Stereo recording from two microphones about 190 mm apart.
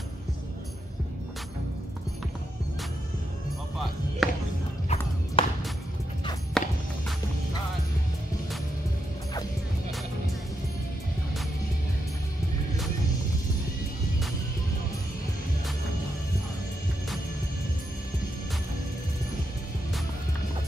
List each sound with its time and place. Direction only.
4.2 s basketball bounce: centre (ahead or behind)
5.4 s music: 30° left (ahead or behind)
6.6 s music: 5° left (ahead or behind)